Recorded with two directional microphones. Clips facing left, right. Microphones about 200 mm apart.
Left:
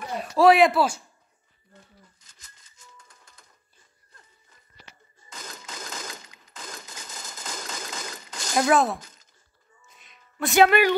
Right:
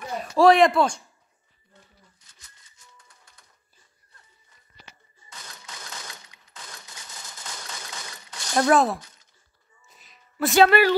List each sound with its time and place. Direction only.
0.2 s speech: centre (ahead or behind)
2.1 s typewriter: 90° left
5.4 s a sound: 90° left
8.5 s speech: centre (ahead or behind)
9.0 s a sound: 90° left
9.8 s music: centre (ahead or behind)
10.5 s a woman's voice: 15° left (ahead or behind)